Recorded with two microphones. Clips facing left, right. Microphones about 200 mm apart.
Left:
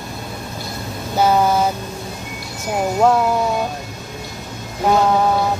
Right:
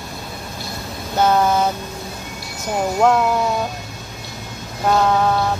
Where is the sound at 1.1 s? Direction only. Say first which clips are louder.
Left 1 dB; 10° left (ahead or behind).